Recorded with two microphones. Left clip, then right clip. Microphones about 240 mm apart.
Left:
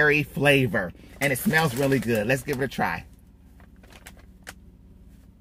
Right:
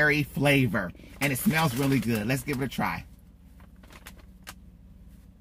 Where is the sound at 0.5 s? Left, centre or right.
Right.